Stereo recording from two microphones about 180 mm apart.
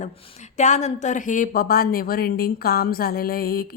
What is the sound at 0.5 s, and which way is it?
A woman's voice, 40° left (ahead or behind).